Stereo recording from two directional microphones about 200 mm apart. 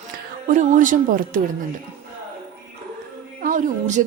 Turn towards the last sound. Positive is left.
turn(degrees=-40)  # may be behind; listen again after turning